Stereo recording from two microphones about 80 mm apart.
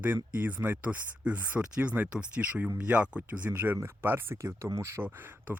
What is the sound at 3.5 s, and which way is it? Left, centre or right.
Speech, right.